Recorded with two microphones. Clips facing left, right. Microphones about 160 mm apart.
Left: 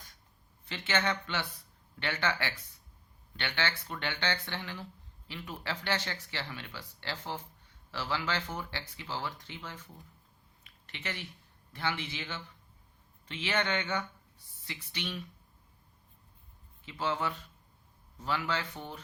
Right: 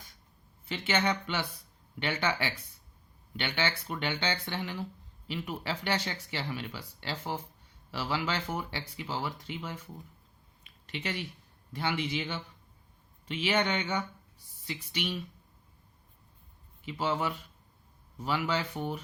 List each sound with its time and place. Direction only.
0.6 s speech: 10° right (ahead or behind)
10.8 s speech: 15° right (ahead or behind)
16.8 s speech: 10° right (ahead or behind)